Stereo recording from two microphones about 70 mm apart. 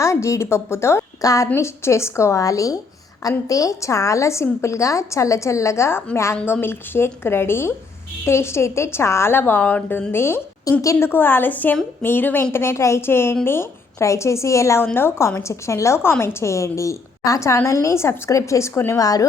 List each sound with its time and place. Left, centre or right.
0.0 s a sound: left
0.5 s a woman's voice: left
1.2 s speech: left
1.5 s a woman's voice: left
6.3 s a woman's voice: left
10.1 s a woman's voice: left
10.7 s a woman's voice: left
11.1 s a woman's voice: left
14.9 s a woman's voice: left
18.9 s speech: left